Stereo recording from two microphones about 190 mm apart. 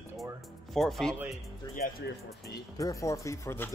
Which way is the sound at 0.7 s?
Centre (ahead or behind).